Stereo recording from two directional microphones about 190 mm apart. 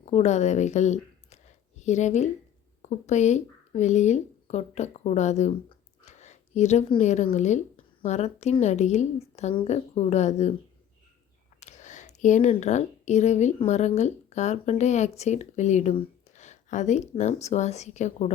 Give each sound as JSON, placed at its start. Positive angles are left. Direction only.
{"t": 0.0, "sound": "a woman's voice", "side_deg": 35}
{"t": 11.6, "sound": "a woman's voice", "side_deg": 40}